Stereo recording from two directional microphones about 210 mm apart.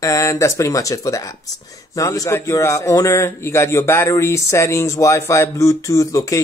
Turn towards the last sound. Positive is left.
turn(degrees=15)  # may be behind; listen again after turning